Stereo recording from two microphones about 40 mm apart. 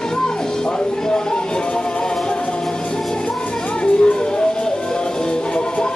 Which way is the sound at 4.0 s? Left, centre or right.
Left.